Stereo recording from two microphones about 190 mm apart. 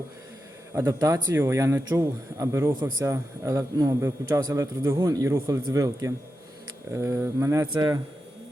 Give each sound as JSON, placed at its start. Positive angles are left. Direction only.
{"t": 0.8, "sound": "speech", "side_deg": -20}